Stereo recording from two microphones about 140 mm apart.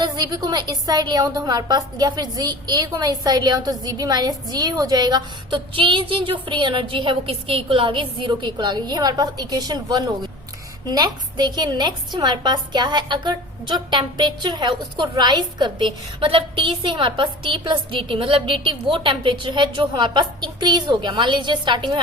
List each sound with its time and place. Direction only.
0.0 s a woman's voice: 30° right (ahead or behind)